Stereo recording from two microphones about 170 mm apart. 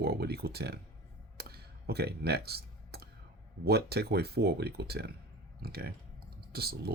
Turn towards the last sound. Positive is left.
turn(degrees=-65)  # may be behind; listen again after turning